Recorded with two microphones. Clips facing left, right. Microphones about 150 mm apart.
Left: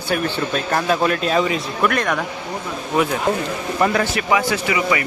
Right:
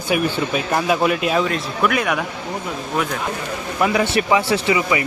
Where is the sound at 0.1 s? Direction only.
5° right (ahead or behind).